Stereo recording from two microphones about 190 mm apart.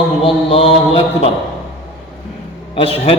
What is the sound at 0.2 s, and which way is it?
Mantra, 30° left (ahead or behind).